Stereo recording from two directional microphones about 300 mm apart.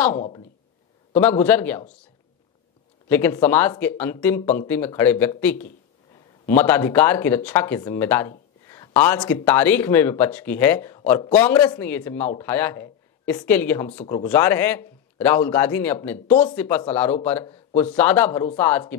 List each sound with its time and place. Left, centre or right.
0.1 s speech: left
1.1 s speech: centre
3.1 s speech: centre